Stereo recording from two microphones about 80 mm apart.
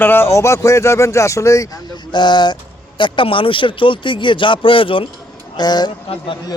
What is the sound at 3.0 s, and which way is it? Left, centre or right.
A man's voice, left.